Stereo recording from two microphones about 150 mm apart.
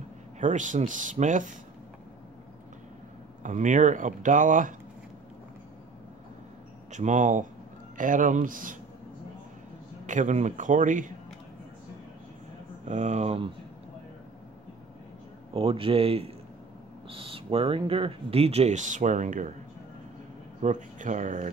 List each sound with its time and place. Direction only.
0.4 s speech: 55° right (ahead or behind)
3.4 s speech: 55° right (ahead or behind)
6.9 s speech: 55° right (ahead or behind)
10.0 s speech: 55° right (ahead or behind)
12.8 s speech: 50° right (ahead or behind)
15.5 s speech: 35° right (ahead or behind); by 19.5 s 55° right (ahead or behind)
20.6 s speech: 55° right (ahead or behind)